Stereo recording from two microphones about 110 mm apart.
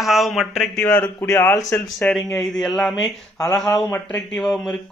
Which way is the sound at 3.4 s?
30° left (ahead or behind).